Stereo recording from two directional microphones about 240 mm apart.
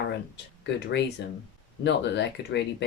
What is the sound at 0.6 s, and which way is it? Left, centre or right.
Speech, left.